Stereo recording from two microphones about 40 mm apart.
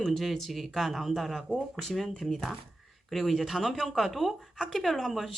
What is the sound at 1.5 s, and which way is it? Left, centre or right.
Speech, right.